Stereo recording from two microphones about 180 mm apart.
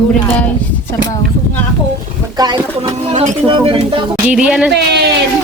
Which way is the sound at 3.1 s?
30° right (ahead or behind).